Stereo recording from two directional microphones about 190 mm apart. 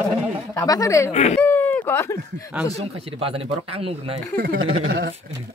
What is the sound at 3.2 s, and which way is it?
Speech, 30° right (ahead or behind).